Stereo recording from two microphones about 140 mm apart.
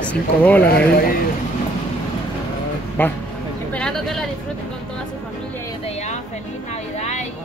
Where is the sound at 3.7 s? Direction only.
5° left (ahead or behind).